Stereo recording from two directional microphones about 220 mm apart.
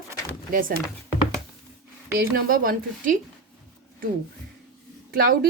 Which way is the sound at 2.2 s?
40° right (ahead or behind).